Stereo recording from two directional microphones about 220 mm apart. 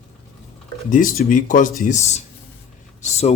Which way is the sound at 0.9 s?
40° left (ahead or behind).